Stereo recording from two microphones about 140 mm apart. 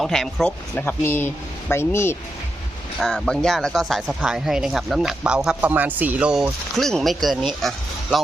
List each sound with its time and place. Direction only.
0.0 s speech: centre (ahead or behind)
0.8 s speech: 15° left (ahead or behind)
3.0 s speech: centre (ahead or behind)